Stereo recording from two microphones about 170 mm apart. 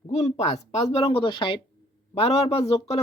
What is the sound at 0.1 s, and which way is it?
Speech, 40° left (ahead or behind).